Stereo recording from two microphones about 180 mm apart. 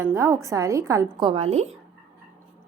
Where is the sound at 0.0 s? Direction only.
15° right (ahead or behind).